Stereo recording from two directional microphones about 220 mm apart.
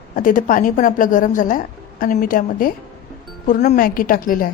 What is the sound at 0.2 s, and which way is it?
A woman's voice, 40° left (ahead or behind).